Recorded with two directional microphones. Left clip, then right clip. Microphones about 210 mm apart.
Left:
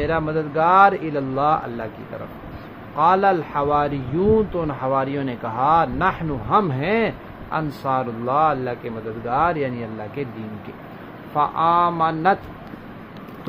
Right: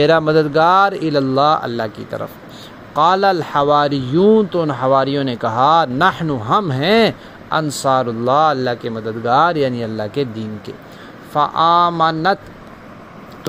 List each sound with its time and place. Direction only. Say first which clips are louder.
0.0 s speech: right 10 dB; 50° right (ahead or behind)
3.0 s speech: right 3 dB; 45° right (ahead or behind)
11.3 s speech: right 5 dB; 35° right (ahead or behind)